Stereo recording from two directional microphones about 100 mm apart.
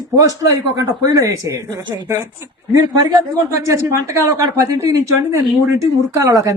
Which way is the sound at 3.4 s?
30° right (ahead or behind).